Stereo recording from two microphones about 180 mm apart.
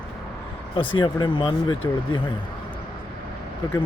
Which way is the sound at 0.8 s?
25° left (ahead or behind).